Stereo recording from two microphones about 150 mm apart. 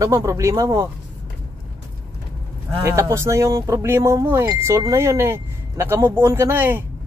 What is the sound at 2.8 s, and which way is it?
Speech, 20° right (ahead or behind).